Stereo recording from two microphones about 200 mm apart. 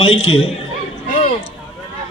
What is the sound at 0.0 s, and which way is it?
Speech, 30° left (ahead or behind).